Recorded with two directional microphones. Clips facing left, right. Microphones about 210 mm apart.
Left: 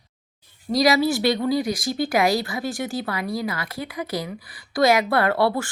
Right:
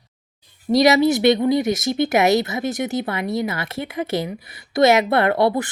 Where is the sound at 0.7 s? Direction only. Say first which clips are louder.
Right 4 dB; 25° right (ahead or behind).